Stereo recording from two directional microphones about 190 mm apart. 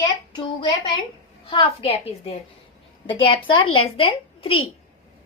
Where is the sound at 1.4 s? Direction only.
30° left (ahead or behind).